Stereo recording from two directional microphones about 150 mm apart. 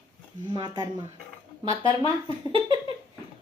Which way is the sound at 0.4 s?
30° right (ahead or behind).